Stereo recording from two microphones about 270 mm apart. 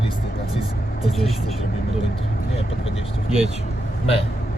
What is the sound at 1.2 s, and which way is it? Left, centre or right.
Speech, left.